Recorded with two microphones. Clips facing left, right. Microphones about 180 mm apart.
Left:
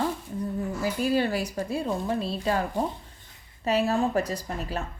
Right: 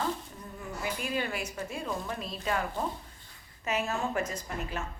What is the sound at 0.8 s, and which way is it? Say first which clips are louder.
Speech: left 8 dB; 35° left (ahead or behind).